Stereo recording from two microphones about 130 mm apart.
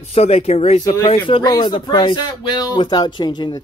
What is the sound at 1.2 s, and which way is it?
Speech, 40° left (ahead or behind).